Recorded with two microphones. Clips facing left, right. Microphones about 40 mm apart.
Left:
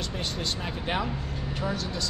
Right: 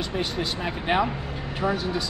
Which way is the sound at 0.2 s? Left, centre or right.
Centre.